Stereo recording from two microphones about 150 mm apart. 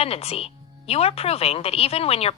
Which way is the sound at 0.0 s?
40° left (ahead or behind).